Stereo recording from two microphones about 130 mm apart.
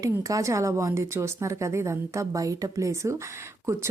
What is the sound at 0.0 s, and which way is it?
Speech, 25° right (ahead or behind).